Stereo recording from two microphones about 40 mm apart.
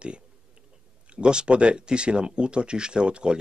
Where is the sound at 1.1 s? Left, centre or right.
Right.